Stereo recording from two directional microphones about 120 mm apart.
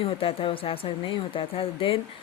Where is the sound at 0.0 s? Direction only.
55° left (ahead or behind).